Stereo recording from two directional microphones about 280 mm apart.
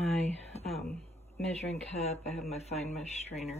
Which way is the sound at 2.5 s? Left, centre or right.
Left.